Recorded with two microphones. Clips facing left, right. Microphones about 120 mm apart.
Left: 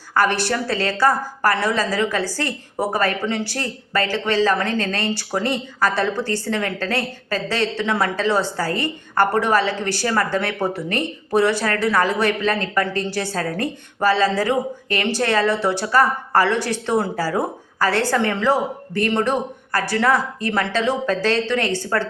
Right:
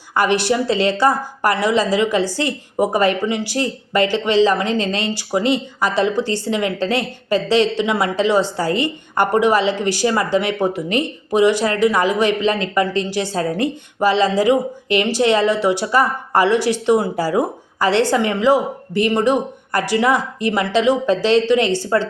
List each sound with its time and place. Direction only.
0.1 s a woman's voice: 15° right (ahead or behind)